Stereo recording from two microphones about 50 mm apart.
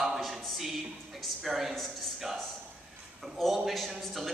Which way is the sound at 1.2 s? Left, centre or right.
Centre.